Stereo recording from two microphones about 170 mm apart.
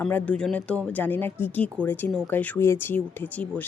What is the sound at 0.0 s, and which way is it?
Speech, 10° left (ahead or behind).